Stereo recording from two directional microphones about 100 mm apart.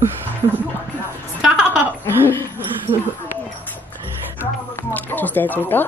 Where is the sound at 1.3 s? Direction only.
5° right (ahead or behind).